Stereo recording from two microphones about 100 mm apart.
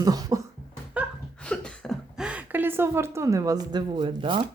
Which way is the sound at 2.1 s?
10° right (ahead or behind).